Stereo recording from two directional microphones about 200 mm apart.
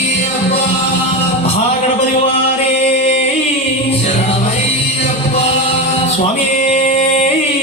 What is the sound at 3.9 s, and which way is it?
Music, 30° left (ahead or behind).